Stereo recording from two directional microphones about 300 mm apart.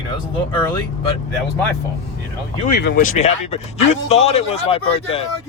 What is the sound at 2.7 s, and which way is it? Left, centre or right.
Speech, left.